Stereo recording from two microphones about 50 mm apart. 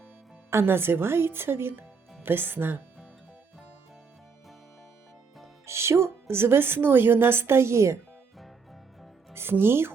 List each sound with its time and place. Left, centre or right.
0.7 s a woman's voice: right
5.6 s speech: right
9.3 s speech: right